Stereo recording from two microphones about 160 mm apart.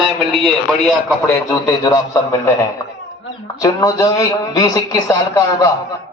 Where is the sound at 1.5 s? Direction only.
25° left (ahead or behind).